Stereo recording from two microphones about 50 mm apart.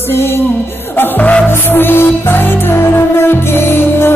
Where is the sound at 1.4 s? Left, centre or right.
Left.